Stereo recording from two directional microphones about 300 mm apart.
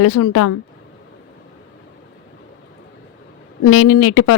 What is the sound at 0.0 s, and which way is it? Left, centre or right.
Speech, left.